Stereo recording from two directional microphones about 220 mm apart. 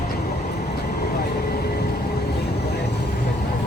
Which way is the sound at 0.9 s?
45° left (ahead or behind).